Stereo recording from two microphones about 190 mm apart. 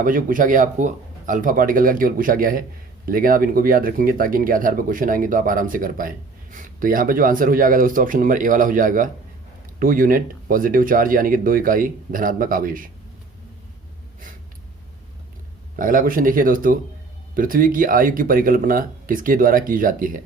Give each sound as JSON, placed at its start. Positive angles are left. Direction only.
{"t": 0.0, "sound": "speech", "side_deg": -45}
{"t": 15.7, "sound": "speech", "side_deg": -45}